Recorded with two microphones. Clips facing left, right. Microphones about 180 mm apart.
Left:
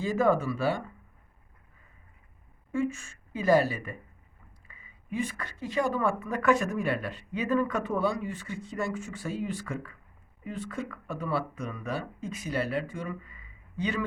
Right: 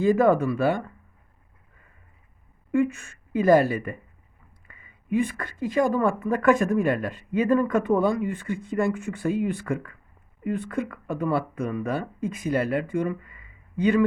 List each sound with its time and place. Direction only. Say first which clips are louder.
0.0 s speech: right 6 dB; 55° right (ahead or behind)
2.7 s a woman's voice: right 7 dB; 60° right (ahead or behind)